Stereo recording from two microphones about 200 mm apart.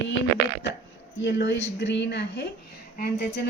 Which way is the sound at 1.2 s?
60° left (ahead or behind).